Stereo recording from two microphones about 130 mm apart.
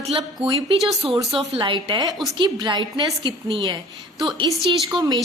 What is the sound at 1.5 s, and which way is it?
A woman's voice, 40° right (ahead or behind).